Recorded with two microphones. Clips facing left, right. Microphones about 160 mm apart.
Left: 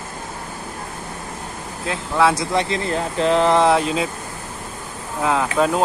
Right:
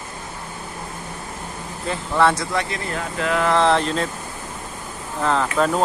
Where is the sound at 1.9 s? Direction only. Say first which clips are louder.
Even; 5° left (ahead or behind).